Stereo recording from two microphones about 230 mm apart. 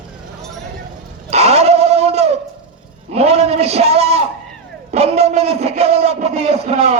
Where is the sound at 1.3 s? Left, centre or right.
Right.